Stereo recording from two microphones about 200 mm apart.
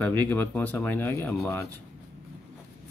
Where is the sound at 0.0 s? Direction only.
10° left (ahead or behind).